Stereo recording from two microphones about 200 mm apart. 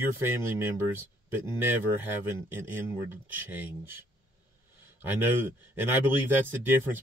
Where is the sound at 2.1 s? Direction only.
10° right (ahead or behind).